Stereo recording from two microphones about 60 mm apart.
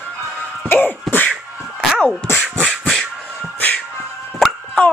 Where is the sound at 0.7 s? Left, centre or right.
Left.